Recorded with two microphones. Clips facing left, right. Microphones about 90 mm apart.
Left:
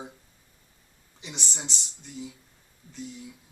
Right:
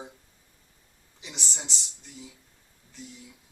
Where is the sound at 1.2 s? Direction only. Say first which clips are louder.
Left 2 dB; centre (ahead or behind).